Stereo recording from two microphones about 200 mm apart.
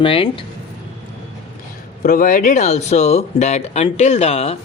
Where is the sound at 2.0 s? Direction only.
40° left (ahead or behind).